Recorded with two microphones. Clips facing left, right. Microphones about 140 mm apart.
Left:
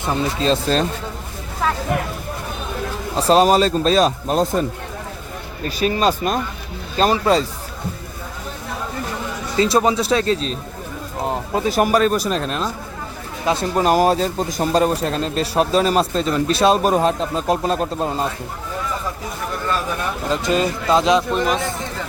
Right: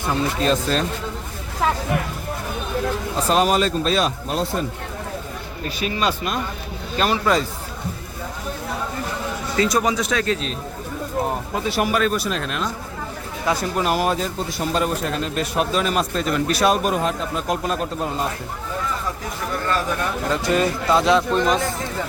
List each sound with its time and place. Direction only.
0.0 s speech: 25° left (ahead or behind)
3.2 s a man's voice: 35° left (ahead or behind)
5.6 s a man's voice: 40° left (ahead or behind)
9.6 s a man's voice: 30° left (ahead or behind)
11.6 s a man's voice: 40° left (ahead or behind)
13.4 s speech: 25° left (ahead or behind)
13.7 s a man's voice: 40° left (ahead or behind)
20.2 s speech: 20° left (ahead or behind)
21.2 s speech: centre (ahead or behind)